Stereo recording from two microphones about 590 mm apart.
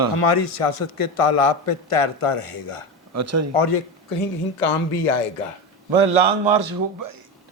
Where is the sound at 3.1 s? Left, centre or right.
Right.